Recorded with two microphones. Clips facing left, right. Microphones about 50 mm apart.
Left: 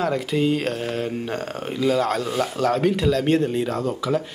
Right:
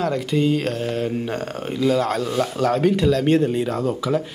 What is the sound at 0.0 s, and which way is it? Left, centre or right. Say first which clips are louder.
Speech: right 1 dB; centre.